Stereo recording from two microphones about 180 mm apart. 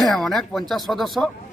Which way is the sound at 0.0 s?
Centre (ahead or behind).